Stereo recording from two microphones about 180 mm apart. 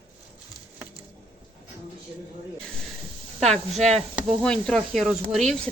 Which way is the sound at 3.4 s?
40° right (ahead or behind).